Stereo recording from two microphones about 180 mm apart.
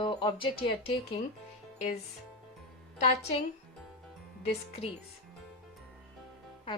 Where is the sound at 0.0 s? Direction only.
25° left (ahead or behind).